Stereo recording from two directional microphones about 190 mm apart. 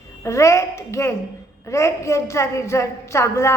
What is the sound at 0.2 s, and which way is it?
A woman's voice, 15° left (ahead or behind).